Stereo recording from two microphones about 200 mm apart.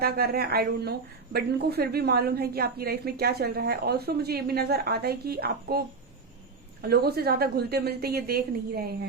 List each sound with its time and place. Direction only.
0.0 s speech: 50° right (ahead or behind)
6.8 s speech: 50° right (ahead or behind)